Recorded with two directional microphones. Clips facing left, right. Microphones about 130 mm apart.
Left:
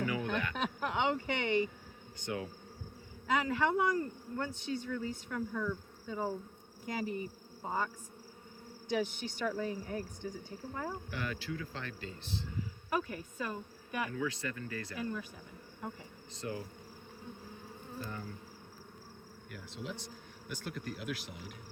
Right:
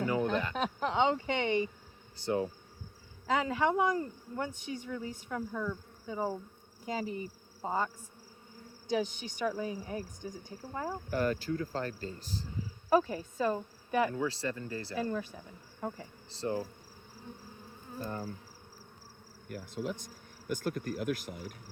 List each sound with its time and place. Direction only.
0.0 s a sound: 30° right (ahead or behind)
2.1 s speech: 35° right (ahead or behind)
3.5 s speech: 20° right (ahead or behind)
7.6 s insect: 15° right (ahead or behind)
8.9 s speech: 15° right (ahead or behind)
11.1 s speech: 40° right (ahead or behind)
16.3 s speech: 30° right (ahead or behind)
18.0 s speech: 40° right (ahead or behind)
19.5 s speech: 45° right (ahead or behind)